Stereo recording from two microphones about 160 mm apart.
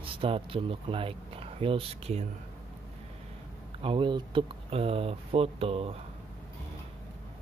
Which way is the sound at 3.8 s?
35° right (ahead or behind).